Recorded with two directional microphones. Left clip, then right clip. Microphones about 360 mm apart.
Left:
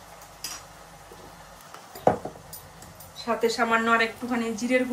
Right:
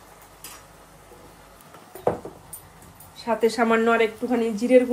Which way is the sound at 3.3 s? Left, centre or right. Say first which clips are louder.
Right 3 dB; right.